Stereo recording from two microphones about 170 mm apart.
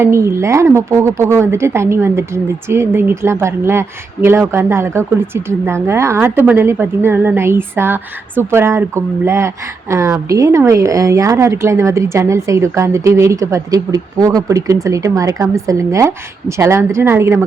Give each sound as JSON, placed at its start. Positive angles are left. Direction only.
{"t": 0.0, "sound": "a woman's voice", "side_deg": -15}